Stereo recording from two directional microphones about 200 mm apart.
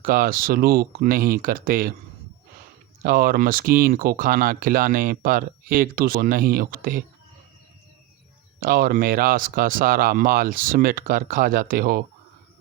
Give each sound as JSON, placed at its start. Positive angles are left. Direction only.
{"t": 0.0, "sound": "speech", "side_deg": -45}
{"t": 3.0, "sound": "speech", "side_deg": -50}
{"t": 8.6, "sound": "speech", "side_deg": -45}